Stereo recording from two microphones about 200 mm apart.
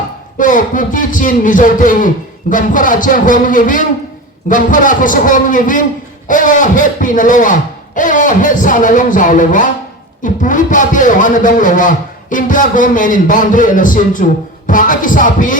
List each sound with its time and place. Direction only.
0.3 s a man's voice: 40° left (ahead or behind)